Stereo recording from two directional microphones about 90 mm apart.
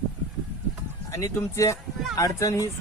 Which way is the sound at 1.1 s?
35° left (ahead or behind).